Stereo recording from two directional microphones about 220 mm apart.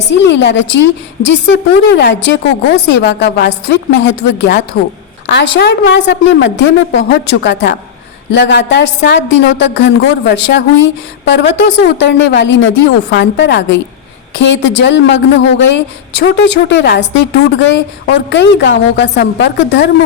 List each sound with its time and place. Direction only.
0.1 s a woman's voice: 55° left (ahead or behind)